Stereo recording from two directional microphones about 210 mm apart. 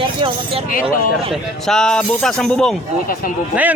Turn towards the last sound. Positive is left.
turn(degrees=-5)  # may be behind; listen again after turning